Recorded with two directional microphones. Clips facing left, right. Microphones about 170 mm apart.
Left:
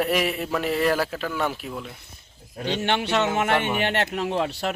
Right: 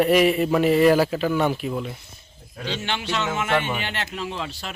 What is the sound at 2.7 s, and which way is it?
Speech, 60° left (ahead or behind).